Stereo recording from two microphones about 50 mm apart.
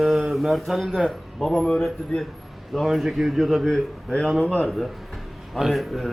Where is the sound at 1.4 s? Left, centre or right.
Centre.